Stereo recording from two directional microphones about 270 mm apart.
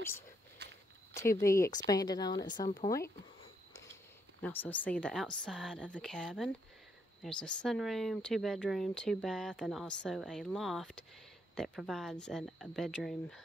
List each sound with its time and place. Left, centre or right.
0.6 s walk: right
1.1 s a woman's voice: centre
4.4 s speech: centre